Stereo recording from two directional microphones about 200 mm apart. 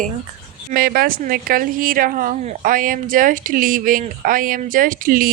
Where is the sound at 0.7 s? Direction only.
50° right (ahead or behind).